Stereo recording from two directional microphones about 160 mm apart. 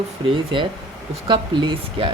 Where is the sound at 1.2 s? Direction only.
30° right (ahead or behind).